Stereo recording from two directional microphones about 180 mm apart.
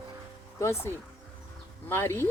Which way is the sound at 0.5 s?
15° left (ahead or behind).